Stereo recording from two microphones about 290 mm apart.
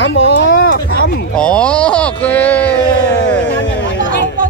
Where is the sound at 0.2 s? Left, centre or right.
Left.